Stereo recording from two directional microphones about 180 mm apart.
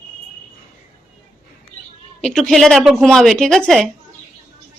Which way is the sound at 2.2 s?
5° left (ahead or behind).